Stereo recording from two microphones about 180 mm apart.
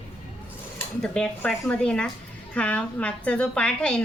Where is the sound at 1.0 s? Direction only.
5° left (ahead or behind).